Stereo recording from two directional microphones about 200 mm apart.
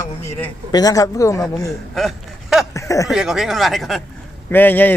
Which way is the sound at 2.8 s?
15° left (ahead or behind).